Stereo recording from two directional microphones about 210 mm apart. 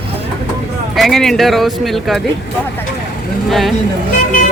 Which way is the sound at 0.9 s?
Centre (ahead or behind).